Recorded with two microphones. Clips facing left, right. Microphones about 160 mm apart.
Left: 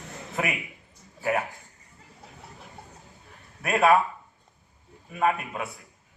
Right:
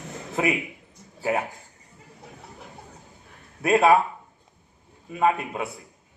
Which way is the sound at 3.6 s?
30° right (ahead or behind).